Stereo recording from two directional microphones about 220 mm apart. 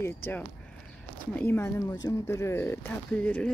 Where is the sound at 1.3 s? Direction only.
10° left (ahead or behind).